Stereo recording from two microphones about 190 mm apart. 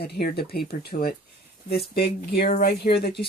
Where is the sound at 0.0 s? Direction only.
55° left (ahead or behind).